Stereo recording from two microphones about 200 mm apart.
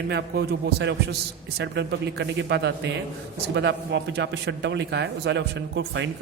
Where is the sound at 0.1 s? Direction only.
55° right (ahead or behind).